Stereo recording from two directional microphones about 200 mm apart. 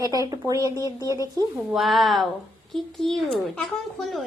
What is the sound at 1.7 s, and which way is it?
A woman's voice, centre (ahead or behind).